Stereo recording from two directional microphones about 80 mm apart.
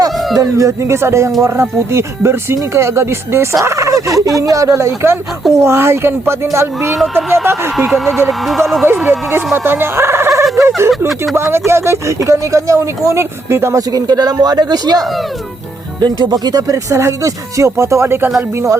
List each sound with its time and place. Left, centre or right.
0.3 s speech: right
7.0 s speech: centre
8.9 s speech: right
13.9 s speech: right